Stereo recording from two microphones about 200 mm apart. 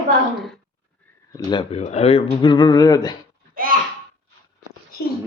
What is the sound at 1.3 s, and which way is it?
Speech, 25° left (ahead or behind).